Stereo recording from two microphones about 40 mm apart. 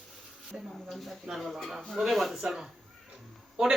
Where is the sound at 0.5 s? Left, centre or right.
Centre.